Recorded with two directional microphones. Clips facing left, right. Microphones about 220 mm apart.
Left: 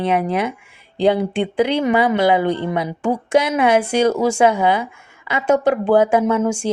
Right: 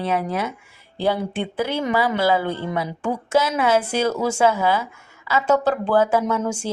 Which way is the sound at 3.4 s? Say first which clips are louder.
Left 4 dB; 25° left (ahead or behind).